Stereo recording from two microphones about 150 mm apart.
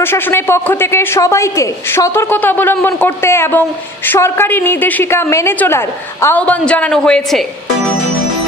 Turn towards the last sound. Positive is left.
turn(degrees=5)  # may be behind; listen again after turning